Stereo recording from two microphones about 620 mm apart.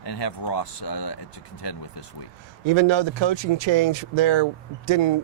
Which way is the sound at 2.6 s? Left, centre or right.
Right.